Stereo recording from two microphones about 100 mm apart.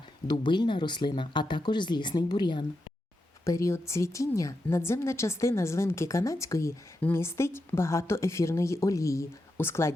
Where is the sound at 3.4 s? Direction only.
30° left (ahead or behind).